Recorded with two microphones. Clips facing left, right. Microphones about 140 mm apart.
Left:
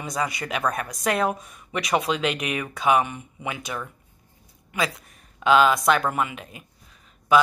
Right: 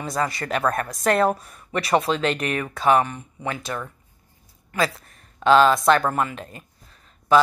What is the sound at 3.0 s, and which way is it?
Speech, 15° left (ahead or behind).